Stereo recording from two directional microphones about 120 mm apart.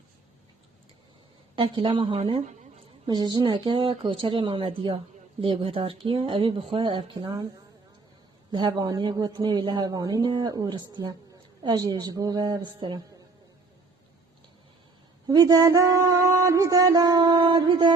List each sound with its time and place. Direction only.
1.5 s speech: 45° right (ahead or behind)
8.5 s speech: 35° right (ahead or behind)
15.3 s mantra: 35° right (ahead or behind)